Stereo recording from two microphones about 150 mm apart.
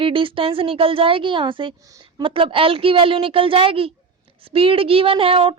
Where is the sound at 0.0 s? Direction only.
35° right (ahead or behind).